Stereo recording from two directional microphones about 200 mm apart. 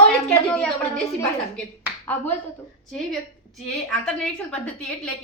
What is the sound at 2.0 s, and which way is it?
A woman's voice, 10° left (ahead or behind).